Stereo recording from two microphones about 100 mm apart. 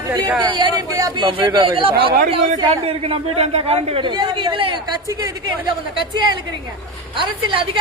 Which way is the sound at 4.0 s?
50° right (ahead or behind).